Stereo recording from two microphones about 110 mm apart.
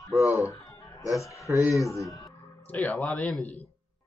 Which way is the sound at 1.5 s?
30° left (ahead or behind).